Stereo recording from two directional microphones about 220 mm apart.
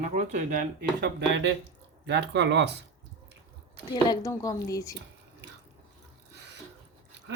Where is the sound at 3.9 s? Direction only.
15° left (ahead or behind).